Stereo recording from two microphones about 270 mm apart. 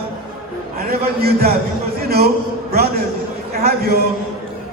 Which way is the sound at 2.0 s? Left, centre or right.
Right.